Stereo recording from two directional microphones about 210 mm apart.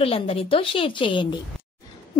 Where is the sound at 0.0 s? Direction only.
25° left (ahead or behind).